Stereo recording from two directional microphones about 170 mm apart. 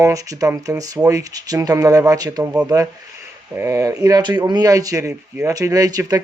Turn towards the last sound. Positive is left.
turn(degrees=-20)  # may be behind; listen again after turning